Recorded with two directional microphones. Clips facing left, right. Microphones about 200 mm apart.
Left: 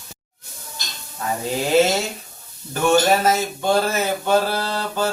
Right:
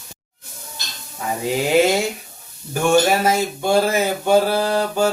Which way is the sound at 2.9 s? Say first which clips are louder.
Right 1 dB; 10° right (ahead or behind).